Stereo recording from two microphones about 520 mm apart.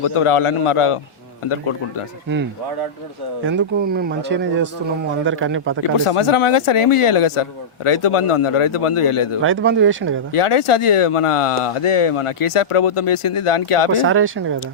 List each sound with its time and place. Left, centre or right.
0.0 s speech: left
3.4 s speech: centre
6.1 s speech: left
9.4 s speech: right
10.3 s speech: left
14.0 s speech: right